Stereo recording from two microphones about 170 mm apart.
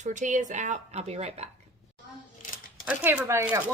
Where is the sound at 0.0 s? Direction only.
45° right (ahead or behind).